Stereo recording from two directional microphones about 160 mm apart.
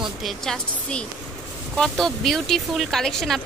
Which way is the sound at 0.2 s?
Centre (ahead or behind).